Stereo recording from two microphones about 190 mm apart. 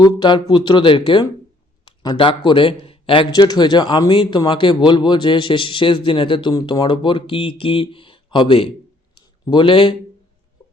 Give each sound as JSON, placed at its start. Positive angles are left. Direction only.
{"t": 0.0, "sound": "speech", "side_deg": 25}